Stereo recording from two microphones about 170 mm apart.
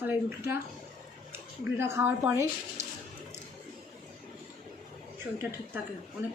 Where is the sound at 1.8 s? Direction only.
15° right (ahead or behind).